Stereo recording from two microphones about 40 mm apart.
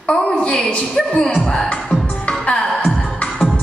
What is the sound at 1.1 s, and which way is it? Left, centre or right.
Music, left.